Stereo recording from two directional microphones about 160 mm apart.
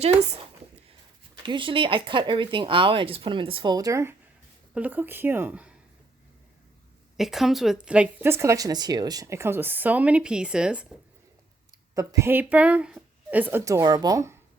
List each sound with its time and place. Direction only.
0.0 s speech: 40° right (ahead or behind)
1.5 s speech: 30° right (ahead or behind)
4.7 s a woman's voice: 10° right (ahead or behind)
7.2 s a woman's voice: centre (ahead or behind)
11.9 s a woman's voice: 20° right (ahead or behind)